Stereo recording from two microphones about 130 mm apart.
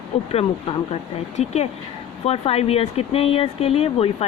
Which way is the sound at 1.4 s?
60° left (ahead or behind).